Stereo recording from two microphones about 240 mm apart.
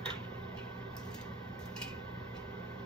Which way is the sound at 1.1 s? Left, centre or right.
Centre.